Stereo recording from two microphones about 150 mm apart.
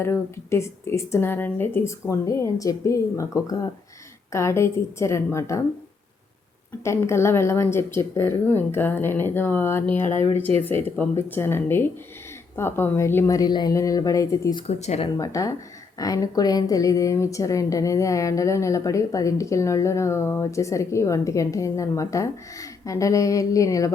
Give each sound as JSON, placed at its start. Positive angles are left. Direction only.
{"t": 0.0, "sound": "a woman's voice", "side_deg": 15}
{"t": 6.8, "sound": "speech", "side_deg": 15}
{"t": 10.0, "sound": "speech", "side_deg": 50}
{"t": 10.6, "sound": "a woman's voice", "side_deg": 15}
{"t": 14.7, "sound": "speech", "side_deg": 45}
{"t": 15.2, "sound": "a woman's voice", "side_deg": 20}